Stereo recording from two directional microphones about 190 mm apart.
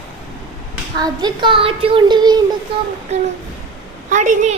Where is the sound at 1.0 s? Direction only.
20° right (ahead or behind).